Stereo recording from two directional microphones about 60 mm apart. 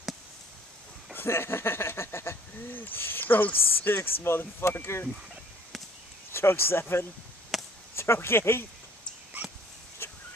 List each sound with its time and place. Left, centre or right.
1.1 s speech: left
2.7 s speech: left
6.3 s speech: left
7.5 s chop: centre
7.9 s speech: left